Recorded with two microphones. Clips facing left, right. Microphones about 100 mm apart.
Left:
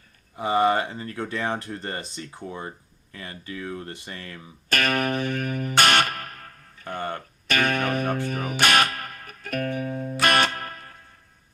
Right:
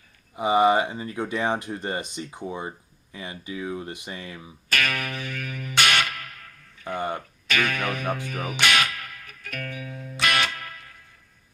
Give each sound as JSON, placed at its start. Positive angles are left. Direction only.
{"t": 0.3, "sound": "speech", "side_deg": -15}
{"t": 4.7, "sound": "music", "side_deg": 40}
{"t": 6.8, "sound": "a sound", "side_deg": -10}
{"t": 7.4, "sound": "music", "side_deg": 45}